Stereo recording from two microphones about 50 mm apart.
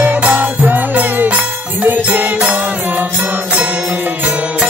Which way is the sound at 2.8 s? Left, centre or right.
Right.